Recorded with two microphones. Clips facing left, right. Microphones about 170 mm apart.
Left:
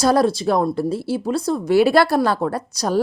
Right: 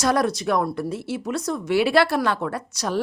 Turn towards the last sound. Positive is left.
turn(degrees=40)  # may be behind; listen again after turning